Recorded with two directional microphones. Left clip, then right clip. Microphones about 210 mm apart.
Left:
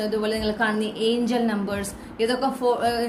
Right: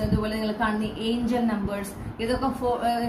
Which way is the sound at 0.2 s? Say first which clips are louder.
Left 3 dB; 45° left (ahead or behind).